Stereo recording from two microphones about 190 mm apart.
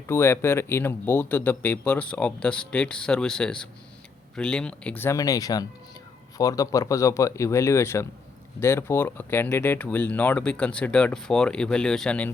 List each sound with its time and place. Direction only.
0.1 s speech: 15° left (ahead or behind)